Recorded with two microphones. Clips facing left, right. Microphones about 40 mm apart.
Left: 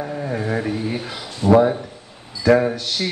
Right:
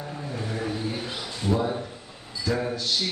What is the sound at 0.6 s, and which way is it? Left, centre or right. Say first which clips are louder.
Speech: left 6 dB; left.